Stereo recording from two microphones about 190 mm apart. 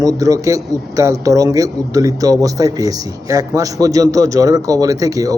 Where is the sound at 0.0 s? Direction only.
15° right (ahead or behind).